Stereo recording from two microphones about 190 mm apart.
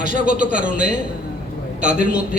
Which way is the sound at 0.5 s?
5° right (ahead or behind).